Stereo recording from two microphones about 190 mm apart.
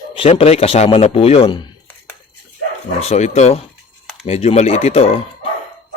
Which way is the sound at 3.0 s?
35° left (ahead or behind).